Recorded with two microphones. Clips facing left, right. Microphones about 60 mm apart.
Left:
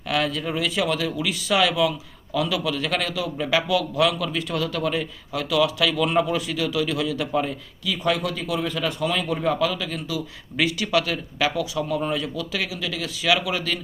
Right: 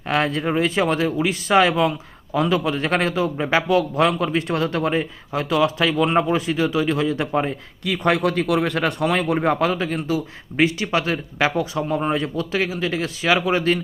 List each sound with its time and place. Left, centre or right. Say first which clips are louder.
0.1 s a man's voice: right 4 dB; right
7.9 s a man's voice: right 4 dB; right